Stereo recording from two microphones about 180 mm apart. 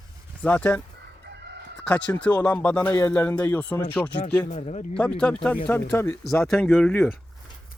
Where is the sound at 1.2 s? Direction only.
65° right (ahead or behind).